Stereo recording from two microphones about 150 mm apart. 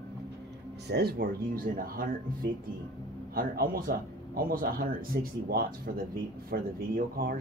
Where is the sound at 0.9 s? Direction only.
90° right.